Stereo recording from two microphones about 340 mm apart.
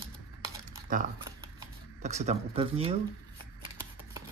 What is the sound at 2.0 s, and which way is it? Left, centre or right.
Speech, centre.